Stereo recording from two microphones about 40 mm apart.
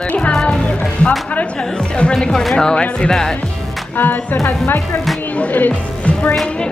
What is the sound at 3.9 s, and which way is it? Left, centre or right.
Speech, left.